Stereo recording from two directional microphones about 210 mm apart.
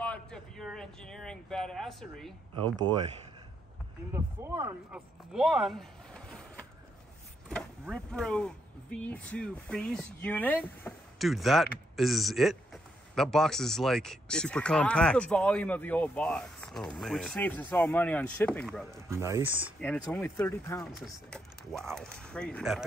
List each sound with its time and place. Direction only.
0.0 s speech: 5° left (ahead or behind)
4.1 s speech: 15° right (ahead or behind)
4.9 s speech: centre (ahead or behind)
7.9 s speech: centre (ahead or behind)
19.0 s speech: 15° right (ahead or behind)
19.8 s speech: 5° left (ahead or behind)